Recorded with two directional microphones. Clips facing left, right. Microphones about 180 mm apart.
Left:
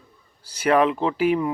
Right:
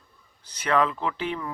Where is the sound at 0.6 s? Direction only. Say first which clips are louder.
Left 5 dB; 30° left (ahead or behind).